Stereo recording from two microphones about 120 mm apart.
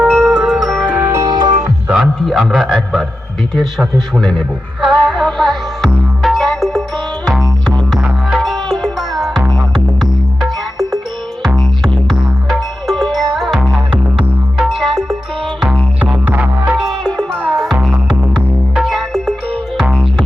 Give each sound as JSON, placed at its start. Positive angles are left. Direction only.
{"t": 0.0, "sound": "music", "side_deg": -10}
{"t": 0.9, "sound": "music", "side_deg": -20}
{"t": 1.2, "sound": "music", "side_deg": -35}
{"t": 1.9, "sound": "a man's voice", "side_deg": -5}
{"t": 6.2, "sound": "music", "side_deg": 0}
{"t": 11.8, "sound": "music", "side_deg": -5}
{"t": 16.7, "sound": "music", "side_deg": 0}
{"t": 17.3, "sound": "music", "side_deg": -10}